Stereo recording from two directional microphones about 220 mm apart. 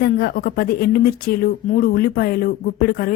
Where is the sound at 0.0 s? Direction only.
45° left (ahead or behind).